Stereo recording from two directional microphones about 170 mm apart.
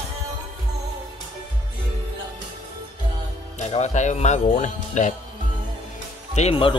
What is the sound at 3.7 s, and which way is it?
Speech, 40° left (ahead or behind).